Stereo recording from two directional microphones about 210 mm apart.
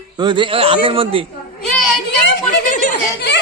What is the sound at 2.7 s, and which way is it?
Speech, 40° left (ahead or behind).